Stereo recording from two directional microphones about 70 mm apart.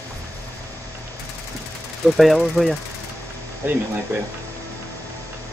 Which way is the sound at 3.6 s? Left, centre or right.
Right.